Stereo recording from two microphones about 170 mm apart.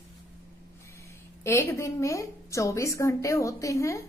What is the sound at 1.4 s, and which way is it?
A woman's voice, 15° left (ahead or behind).